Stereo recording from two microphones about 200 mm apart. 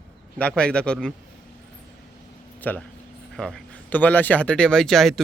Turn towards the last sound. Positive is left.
turn(degrees=0)  # may be behind; listen again after turning